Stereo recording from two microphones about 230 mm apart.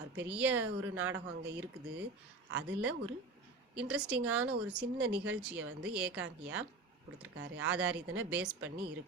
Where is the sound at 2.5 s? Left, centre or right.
Right.